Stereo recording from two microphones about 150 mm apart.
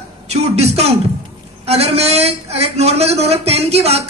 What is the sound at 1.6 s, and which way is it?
A man's voice, 45° right (ahead or behind).